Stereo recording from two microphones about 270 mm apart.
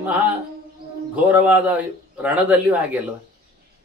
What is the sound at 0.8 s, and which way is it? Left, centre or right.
Music, right.